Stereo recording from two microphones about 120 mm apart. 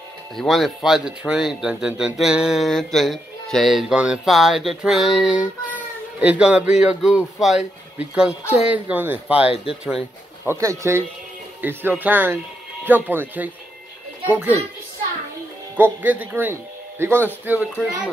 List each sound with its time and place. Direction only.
0.4 s speech: centre (ahead or behind)
10.4 s speech: 20° right (ahead or behind)
15.7 s speech: 15° right (ahead or behind)